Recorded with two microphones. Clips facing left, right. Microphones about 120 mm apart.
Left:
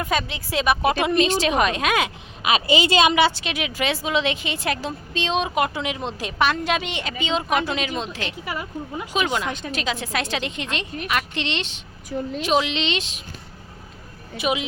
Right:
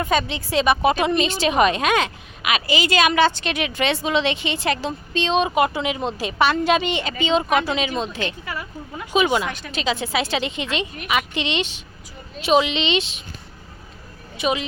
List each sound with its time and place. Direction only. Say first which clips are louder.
0.0 s a woman's voice: right 3 dB; centre (ahead or behind)
2.4 s a woman's voice: left 2 dB; 30° left (ahead or behind)
3.2 s a woman's voice: right 2 dB; 10° left (ahead or behind)
8.4 s a woman's voice: left 2 dB; 20° left (ahead or behind)
9.2 s a woman's voice: right 5 dB; 10° right (ahead or behind)
9.5 s a woman's voice: left 3 dB; 20° left (ahead or behind)
9.7 s a woman's voice: right 6 dB; centre (ahead or behind)
14.3 s a woman's voice: right 1 dB; 5° left (ahead or behind)